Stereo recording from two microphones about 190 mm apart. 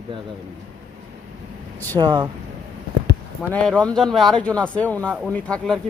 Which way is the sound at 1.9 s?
20° right (ahead or behind).